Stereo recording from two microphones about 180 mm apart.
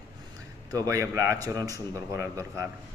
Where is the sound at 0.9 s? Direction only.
15° right (ahead or behind).